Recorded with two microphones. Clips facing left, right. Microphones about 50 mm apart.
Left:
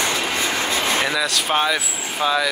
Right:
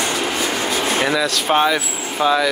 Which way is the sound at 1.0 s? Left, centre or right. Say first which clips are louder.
Right 3 dB; centre.